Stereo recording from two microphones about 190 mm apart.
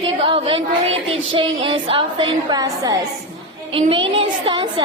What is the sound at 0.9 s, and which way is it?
Child singing, 90° right.